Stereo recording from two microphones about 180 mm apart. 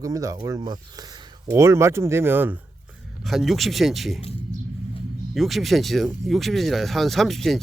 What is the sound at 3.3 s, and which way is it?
Speech, centre (ahead or behind).